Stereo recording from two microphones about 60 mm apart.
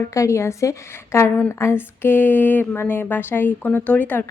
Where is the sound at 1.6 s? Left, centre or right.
Left.